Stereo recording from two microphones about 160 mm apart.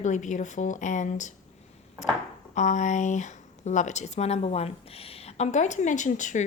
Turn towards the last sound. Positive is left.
turn(degrees=50)  # may be behind; listen again after turning